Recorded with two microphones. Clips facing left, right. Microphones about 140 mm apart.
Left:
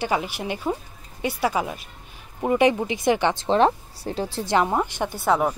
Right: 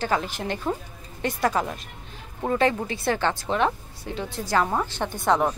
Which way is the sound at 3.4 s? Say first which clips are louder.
Left 5 dB; 35° left (ahead or behind).